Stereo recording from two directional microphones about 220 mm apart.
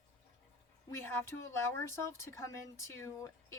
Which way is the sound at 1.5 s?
10° left (ahead or behind).